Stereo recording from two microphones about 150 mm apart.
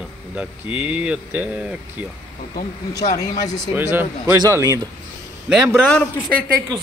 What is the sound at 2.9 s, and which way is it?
Speech, 25° left (ahead or behind).